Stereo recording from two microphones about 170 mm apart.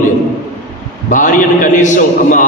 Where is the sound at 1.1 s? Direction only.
50° left (ahead or behind).